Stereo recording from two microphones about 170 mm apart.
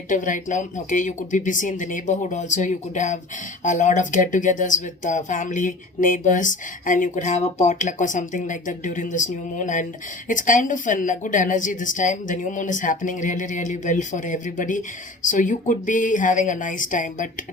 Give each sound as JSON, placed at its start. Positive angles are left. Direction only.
{"t": 0.1, "sound": "speech", "side_deg": 50}